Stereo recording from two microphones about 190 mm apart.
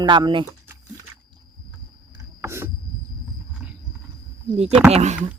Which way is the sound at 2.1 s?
15° right (ahead or behind).